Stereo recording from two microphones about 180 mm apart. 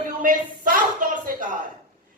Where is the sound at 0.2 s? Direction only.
50° right (ahead or behind).